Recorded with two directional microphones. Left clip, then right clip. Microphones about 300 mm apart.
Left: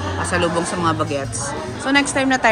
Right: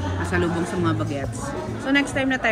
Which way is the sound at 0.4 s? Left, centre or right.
Centre.